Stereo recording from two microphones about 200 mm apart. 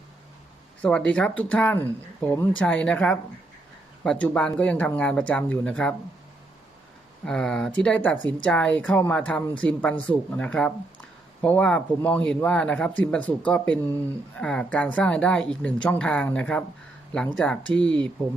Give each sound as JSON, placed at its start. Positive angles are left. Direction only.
{"t": 0.8, "sound": "speech", "side_deg": 5}
{"t": 7.3, "sound": "speech", "side_deg": 0}